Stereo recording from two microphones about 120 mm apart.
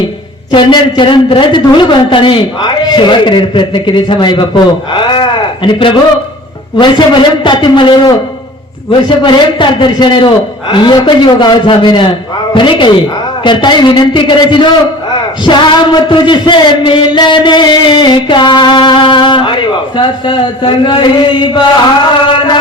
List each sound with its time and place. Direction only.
0.5 s a man's voice: 40° left (ahead or behind)
22.2 s music: 45° left (ahead or behind)